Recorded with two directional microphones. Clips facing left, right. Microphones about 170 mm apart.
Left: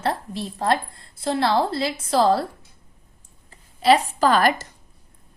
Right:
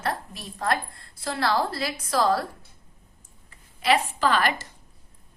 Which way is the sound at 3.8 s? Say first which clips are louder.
Left 5 dB; 35° left (ahead or behind).